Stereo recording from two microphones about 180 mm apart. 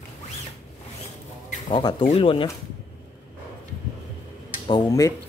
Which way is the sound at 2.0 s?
30° left (ahead or behind).